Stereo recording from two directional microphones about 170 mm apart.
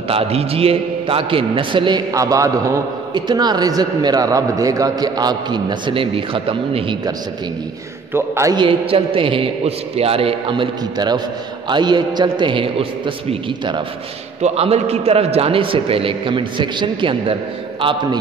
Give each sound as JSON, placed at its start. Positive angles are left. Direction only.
{"t": 0.1, "sound": "a man's voice", "side_deg": -35}
{"t": 8.1, "sound": "a man's voice", "side_deg": -20}